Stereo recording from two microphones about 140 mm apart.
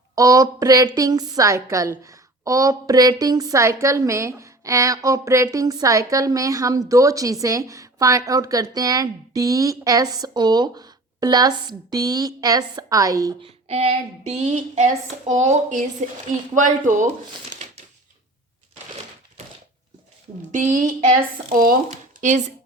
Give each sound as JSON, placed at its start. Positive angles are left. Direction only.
{"t": 0.2, "sound": "a woman's voice", "side_deg": -25}
{"t": 13.4, "sound": "speech", "side_deg": -45}
{"t": 20.5, "sound": "speech", "side_deg": -65}
{"t": 21.5, "sound": "speech", "side_deg": -90}
{"t": 21.8, "sound": "speech", "side_deg": -60}